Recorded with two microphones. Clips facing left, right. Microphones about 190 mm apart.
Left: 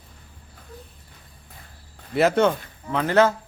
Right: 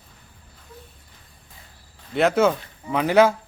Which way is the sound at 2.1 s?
Centre (ahead or behind).